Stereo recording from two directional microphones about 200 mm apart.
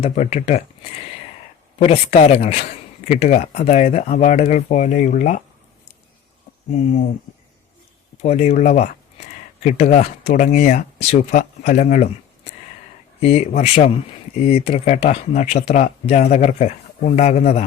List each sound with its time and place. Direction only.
0.0 s speech: 35° left (ahead or behind)
1.8 s speech: 30° left (ahead or behind)
6.7 s speech: 35° left (ahead or behind)
8.2 s speech: 35° left (ahead or behind)
13.1 s speech: 30° left (ahead or behind)